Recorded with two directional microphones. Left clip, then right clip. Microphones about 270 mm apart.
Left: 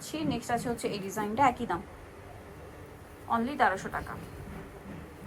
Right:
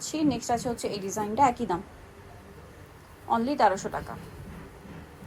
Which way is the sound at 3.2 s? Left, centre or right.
Right.